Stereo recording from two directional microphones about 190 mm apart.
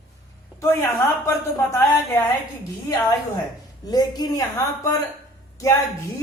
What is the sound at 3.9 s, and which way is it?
Speech, 20° left (ahead or behind).